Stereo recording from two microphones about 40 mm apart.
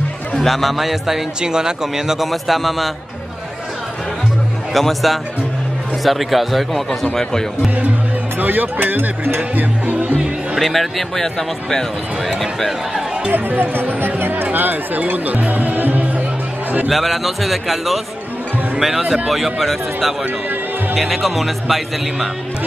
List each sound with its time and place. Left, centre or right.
0.3 s speech: centre
1.4 s speech: centre
2.2 s speech: centre
4.7 s speech: centre
8.4 s speech: right
9.6 s speech: right
10.1 s music: centre
10.6 s speech: centre
13.3 s speech: right
16.9 s speech: centre
19.0 s speech: right
19.3 s speech: centre